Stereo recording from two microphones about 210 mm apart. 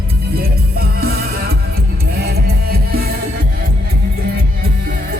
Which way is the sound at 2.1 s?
50° right (ahead or behind).